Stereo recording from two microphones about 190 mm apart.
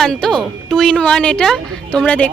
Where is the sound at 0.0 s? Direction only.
5° left (ahead or behind).